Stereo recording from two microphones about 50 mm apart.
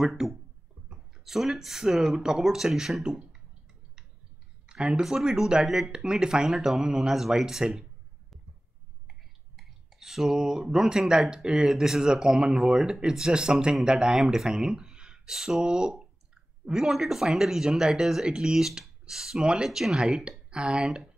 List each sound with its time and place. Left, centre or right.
0.0 s speech: centre
4.6 s a sound: centre
5.0 s speech: centre
9.6 s speech: centre